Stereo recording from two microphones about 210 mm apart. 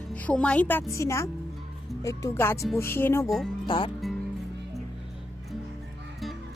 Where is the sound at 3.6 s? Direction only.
20° left (ahead or behind).